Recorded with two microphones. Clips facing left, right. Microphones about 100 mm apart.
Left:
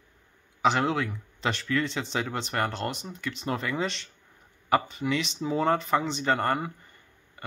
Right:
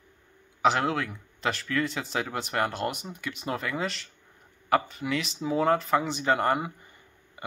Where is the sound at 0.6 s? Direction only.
Centre (ahead or behind).